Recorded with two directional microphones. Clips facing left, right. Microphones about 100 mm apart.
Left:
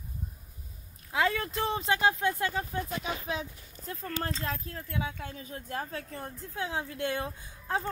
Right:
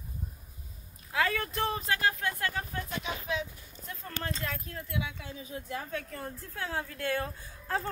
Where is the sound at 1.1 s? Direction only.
25° left (ahead or behind).